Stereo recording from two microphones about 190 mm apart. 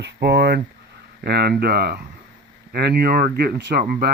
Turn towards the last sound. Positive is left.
turn(degrees=-55)  # may be behind; listen again after turning